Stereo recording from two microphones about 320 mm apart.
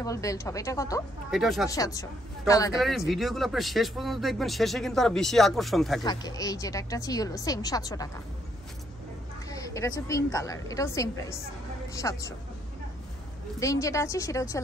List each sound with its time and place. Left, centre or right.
0.0 s speech: centre
1.3 s speech: centre
1.7 s speech: centre
6.0 s speech: centre
9.5 s speech: centre
13.6 s speech: centre